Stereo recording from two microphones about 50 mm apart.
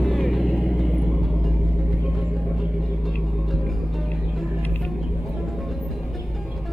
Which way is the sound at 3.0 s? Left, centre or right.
Centre.